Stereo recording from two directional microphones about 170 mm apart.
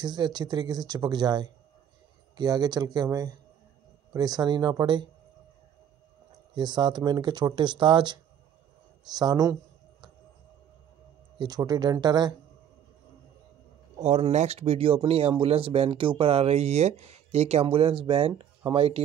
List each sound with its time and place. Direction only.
0.0 s speech: 25° right (ahead or behind)
6.5 s speech: 25° right (ahead or behind)
11.3 s speech: 25° right (ahead or behind)
13.9 s speech: 35° right (ahead or behind)